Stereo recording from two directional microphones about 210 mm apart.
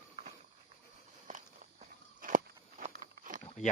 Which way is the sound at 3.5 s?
35° left (ahead or behind).